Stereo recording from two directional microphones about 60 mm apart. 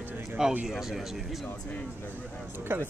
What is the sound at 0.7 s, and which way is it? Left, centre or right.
Speech, centre.